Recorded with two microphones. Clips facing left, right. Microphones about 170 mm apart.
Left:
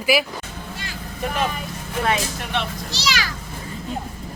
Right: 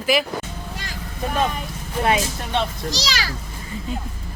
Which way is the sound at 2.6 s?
35° right (ahead or behind).